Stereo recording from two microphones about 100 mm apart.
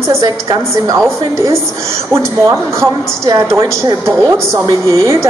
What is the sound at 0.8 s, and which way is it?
A woman's voice, 30° right (ahead or behind).